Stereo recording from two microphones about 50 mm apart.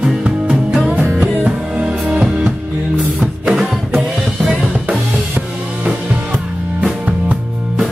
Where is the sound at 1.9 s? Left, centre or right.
Centre.